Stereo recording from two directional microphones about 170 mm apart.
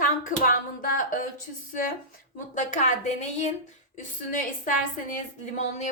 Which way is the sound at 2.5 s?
50° left (ahead or behind).